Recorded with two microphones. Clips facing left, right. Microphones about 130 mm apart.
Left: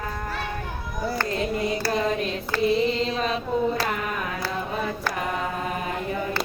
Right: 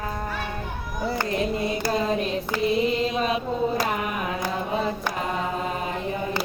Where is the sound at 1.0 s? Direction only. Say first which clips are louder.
Right 1 dB; 20° right (ahead or behind).